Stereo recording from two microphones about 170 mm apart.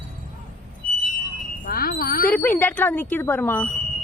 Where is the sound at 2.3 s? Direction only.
10° left (ahead or behind).